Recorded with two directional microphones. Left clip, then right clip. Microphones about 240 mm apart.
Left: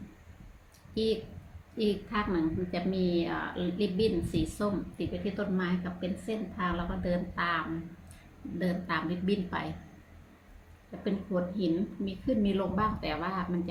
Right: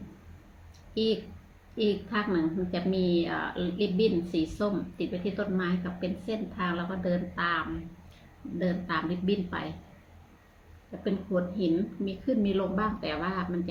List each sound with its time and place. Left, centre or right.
0.9 s a woman's voice: centre
10.9 s a woman's voice: centre